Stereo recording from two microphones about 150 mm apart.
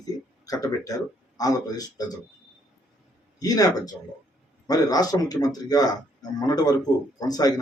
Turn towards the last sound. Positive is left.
turn(degrees=25)  # may be behind; listen again after turning